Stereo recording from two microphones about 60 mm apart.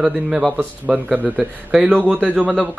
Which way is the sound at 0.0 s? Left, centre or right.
Centre.